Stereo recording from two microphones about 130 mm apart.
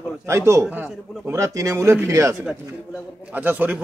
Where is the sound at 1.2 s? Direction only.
20° right (ahead or behind).